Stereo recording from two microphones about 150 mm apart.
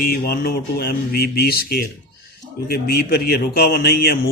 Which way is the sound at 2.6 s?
90° left.